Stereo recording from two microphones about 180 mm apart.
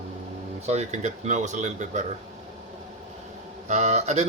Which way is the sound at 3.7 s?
40° right (ahead or behind).